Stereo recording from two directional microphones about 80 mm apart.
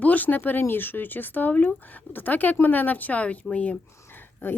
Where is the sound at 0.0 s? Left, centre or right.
Centre.